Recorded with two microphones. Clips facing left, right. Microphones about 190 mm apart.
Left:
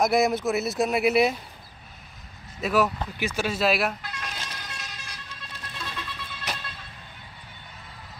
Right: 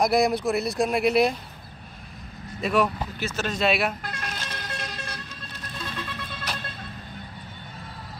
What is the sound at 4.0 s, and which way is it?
Music, 50° right (ahead or behind).